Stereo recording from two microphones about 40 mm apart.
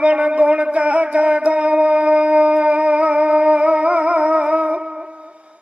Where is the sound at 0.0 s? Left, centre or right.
Right.